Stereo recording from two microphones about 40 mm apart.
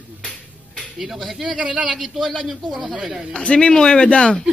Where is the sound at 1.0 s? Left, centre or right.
Centre.